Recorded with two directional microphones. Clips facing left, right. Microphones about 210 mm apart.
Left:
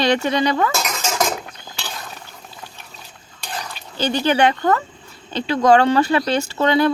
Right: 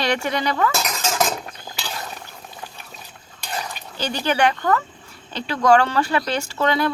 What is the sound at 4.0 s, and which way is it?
Speech, 25° left (ahead or behind).